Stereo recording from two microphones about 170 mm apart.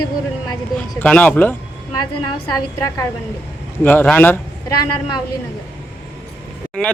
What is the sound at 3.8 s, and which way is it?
Speech, 10° left (ahead or behind).